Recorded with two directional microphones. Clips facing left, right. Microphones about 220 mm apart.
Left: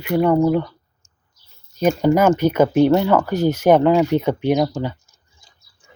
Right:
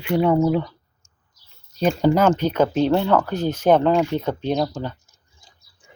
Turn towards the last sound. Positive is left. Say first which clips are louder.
# left 4 dB
turn(degrees=10)  # may be behind; listen again after turning